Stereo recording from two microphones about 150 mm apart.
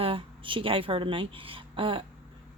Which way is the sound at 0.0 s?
35° right (ahead or behind).